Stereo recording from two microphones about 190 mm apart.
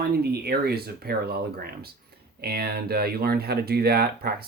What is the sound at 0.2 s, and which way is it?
Speech, 55° right (ahead or behind).